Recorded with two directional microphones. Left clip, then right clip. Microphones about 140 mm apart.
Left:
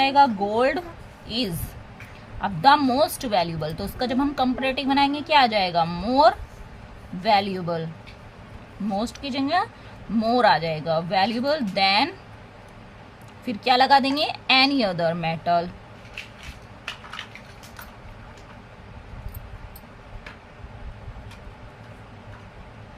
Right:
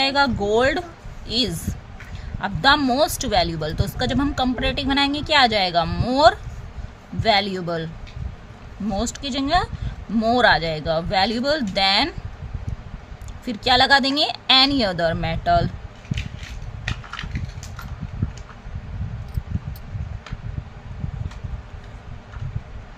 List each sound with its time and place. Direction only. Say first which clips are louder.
0.0 s speech: left 1 dB; 25° right (ahead or behind)
8.9 s speech: right 2 dB; 30° right (ahead or behind)
13.4 s speech: right 2 dB; 25° right (ahead or behind)